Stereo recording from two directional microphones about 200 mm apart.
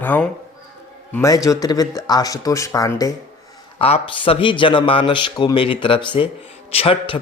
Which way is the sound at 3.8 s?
30° left (ahead or behind).